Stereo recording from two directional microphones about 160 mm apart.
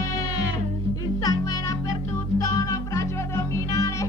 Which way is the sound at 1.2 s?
25° left (ahead or behind).